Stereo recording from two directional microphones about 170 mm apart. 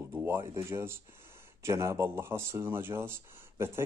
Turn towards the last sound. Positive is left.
turn(degrees=-15)  # may be behind; listen again after turning